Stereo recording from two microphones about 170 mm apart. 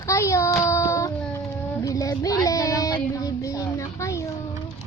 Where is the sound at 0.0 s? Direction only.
15° left (ahead or behind).